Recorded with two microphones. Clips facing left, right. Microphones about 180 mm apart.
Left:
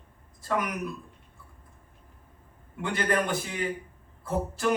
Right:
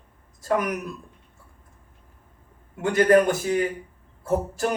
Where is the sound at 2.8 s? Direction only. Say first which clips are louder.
Right 10 dB; 45° right (ahead or behind).